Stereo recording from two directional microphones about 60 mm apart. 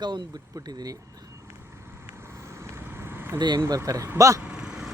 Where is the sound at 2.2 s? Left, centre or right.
Right.